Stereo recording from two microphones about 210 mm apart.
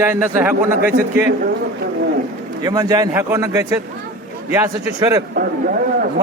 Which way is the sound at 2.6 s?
20° right (ahead or behind).